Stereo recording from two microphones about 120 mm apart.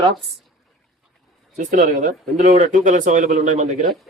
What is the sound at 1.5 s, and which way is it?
Speech, 90° right.